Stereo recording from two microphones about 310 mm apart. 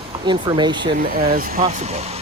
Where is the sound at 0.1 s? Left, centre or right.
Centre.